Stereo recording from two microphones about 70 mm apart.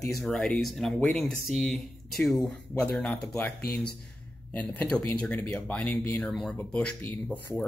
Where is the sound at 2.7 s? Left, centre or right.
Centre.